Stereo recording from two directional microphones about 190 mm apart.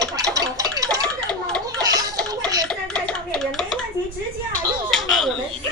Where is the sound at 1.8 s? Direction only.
20° right (ahead or behind).